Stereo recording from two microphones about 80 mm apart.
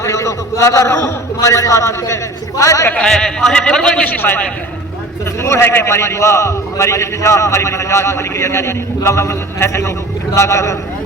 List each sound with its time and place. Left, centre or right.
0.0 s a man's voice: left
2.9 s a man's voice: centre
4.2 s a man's voice: left